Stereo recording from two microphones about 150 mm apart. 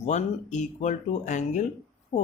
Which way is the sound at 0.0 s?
50° left (ahead or behind).